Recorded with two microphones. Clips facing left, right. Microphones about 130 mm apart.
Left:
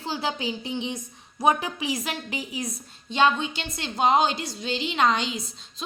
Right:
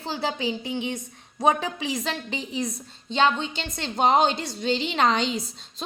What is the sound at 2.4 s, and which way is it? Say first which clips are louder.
Speech: right 3 dB; 5° left (ahead or behind).